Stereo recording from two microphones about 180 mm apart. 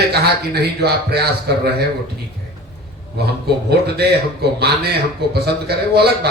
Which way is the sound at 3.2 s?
60° right (ahead or behind).